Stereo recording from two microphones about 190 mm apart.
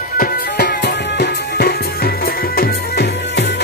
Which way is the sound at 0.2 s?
60° left (ahead or behind).